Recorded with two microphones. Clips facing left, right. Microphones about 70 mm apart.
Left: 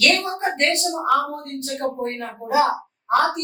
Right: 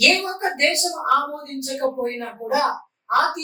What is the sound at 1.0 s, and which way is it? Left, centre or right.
Speech, centre.